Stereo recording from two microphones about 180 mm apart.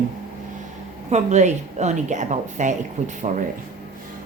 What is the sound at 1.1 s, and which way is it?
A woman's voice, 40° right (ahead or behind).